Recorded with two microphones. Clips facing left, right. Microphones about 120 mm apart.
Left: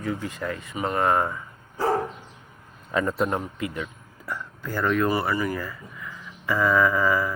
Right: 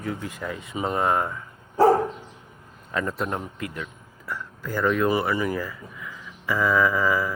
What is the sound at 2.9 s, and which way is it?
Speech, 5° left (ahead or behind).